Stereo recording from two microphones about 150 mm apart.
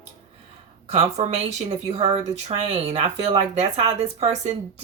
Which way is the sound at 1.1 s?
50° right (ahead or behind).